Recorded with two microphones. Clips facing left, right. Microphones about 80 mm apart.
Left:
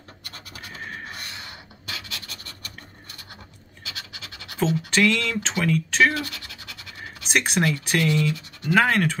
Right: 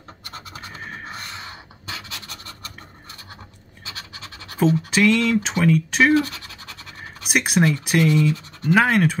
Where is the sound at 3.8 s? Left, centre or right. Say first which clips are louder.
Right 2 dB; right.